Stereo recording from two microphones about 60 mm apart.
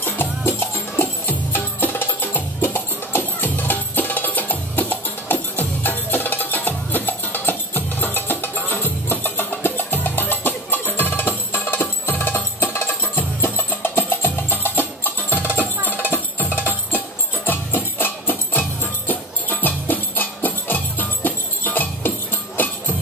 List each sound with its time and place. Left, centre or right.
0.5 s music: left